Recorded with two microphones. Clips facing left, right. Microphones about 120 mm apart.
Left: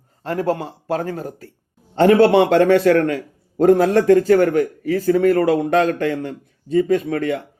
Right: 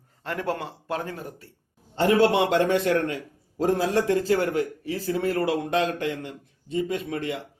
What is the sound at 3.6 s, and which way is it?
A man's voice, 60° left (ahead or behind).